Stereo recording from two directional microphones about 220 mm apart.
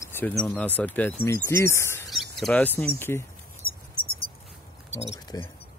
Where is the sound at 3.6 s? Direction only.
40° left (ahead or behind).